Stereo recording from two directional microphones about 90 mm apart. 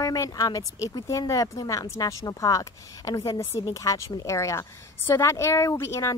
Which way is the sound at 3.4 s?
30° left (ahead or behind).